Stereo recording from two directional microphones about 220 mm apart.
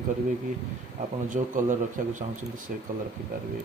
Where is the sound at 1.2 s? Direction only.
35° right (ahead or behind).